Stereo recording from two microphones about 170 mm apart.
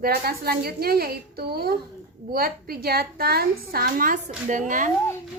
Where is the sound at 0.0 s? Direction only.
65° right (ahead or behind).